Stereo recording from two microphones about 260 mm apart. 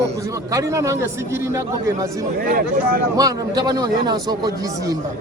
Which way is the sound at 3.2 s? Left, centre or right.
Centre.